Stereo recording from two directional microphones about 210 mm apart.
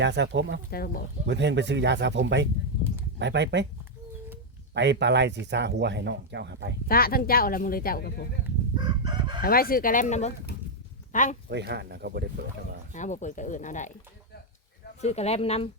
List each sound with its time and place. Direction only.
0.0 s speech: 55° right (ahead or behind)
0.7 s speech: 45° left (ahead or behind)
1.3 s speech: 55° right (ahead or behind)
4.7 s speech: 55° right (ahead or behind)
6.8 s speech: 45° left (ahead or behind)
8.7 s chicken: 20° right (ahead or behind)
9.4 s speech: 45° left (ahead or behind)
11.4 s speech: 55° right (ahead or behind)
12.9 s speech: 35° left (ahead or behind)
15.0 s speech: 30° left (ahead or behind)